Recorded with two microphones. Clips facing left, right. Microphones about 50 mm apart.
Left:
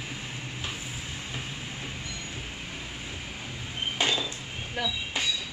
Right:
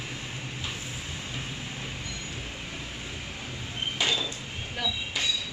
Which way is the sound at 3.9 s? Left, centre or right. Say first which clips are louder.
Left 1 dB; left.